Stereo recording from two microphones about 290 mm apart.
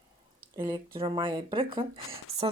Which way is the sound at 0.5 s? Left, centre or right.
Centre.